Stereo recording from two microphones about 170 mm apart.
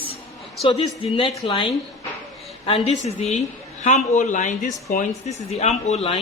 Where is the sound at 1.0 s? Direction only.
30° left (ahead or behind).